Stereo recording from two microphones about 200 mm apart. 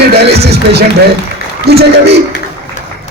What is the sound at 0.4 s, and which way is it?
A man's voice, 55° right (ahead or behind).